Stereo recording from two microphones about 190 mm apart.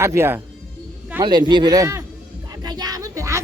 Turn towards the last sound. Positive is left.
turn(degrees=-15)  # may be behind; listen again after turning